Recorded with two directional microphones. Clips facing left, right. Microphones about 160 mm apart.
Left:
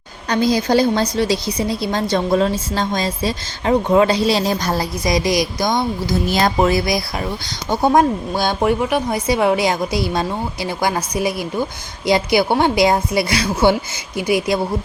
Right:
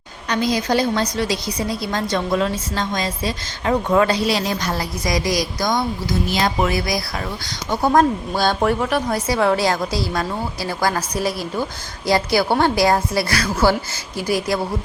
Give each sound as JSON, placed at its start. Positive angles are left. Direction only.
{"t": 0.3, "sound": "a woman's voice", "side_deg": 30}
{"t": 7.9, "sound": "a woman's voice", "side_deg": 15}